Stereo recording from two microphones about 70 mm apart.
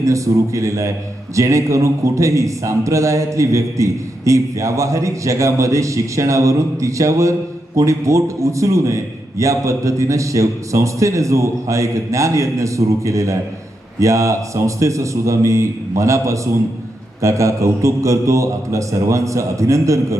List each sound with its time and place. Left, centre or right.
0.0 s a man's voice: right